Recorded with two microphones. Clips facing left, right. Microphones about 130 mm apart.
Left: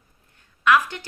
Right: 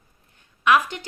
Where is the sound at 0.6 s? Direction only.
15° right (ahead or behind).